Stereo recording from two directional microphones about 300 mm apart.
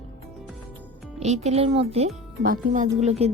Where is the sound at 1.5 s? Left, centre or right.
Centre.